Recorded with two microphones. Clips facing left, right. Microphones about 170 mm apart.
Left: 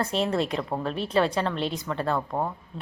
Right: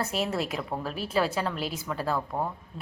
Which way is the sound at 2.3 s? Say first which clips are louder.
Left 2 dB; 20° left (ahead or behind).